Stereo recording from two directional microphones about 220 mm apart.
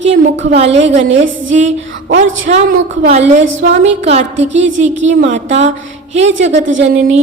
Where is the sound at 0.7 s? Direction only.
30° right (ahead or behind).